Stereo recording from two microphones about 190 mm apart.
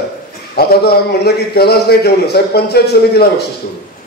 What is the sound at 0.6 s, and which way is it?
A man's voice, 55° left (ahead or behind).